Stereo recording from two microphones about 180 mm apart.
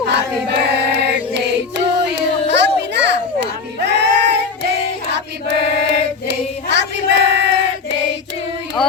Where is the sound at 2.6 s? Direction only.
75° right (ahead or behind).